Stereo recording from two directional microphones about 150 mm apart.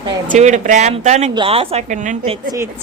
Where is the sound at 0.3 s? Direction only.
50° right (ahead or behind).